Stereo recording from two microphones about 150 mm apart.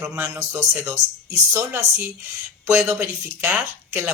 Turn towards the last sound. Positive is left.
turn(degrees=-15)  # may be behind; listen again after turning